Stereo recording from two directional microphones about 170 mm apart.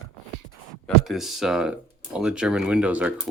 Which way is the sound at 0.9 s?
Centre (ahead or behind).